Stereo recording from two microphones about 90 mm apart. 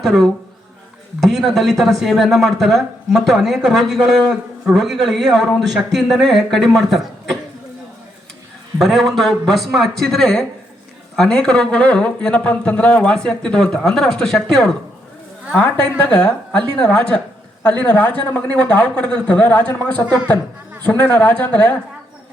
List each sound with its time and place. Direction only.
0.0 s speech: centre (ahead or behind)
8.8 s speech: centre (ahead or behind); by 21.8 s 15° left (ahead or behind)